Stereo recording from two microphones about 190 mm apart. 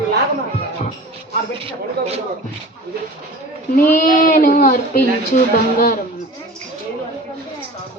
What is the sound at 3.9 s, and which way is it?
A woman's voice, 45° left (ahead or behind).